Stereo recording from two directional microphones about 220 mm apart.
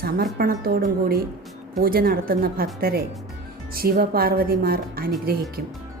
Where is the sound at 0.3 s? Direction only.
45° right (ahead or behind).